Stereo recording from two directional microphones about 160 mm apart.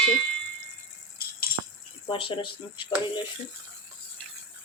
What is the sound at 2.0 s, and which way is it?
Speech, 35° left (ahead or behind).